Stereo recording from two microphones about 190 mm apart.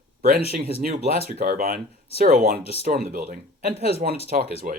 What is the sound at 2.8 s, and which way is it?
Speech, 55° right (ahead or behind).